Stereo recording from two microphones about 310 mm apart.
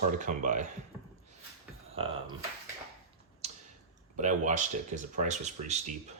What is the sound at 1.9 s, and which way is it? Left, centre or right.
Speech, centre.